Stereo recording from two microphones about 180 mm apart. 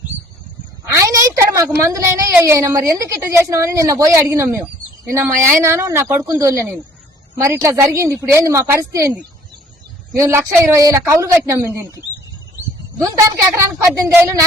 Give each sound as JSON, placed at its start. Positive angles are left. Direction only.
{"t": 0.9, "sound": "a sound", "side_deg": -15}
{"t": 1.5, "sound": "a woman's voice", "side_deg": -15}
{"t": 13.5, "sound": "a woman's voice", "side_deg": -15}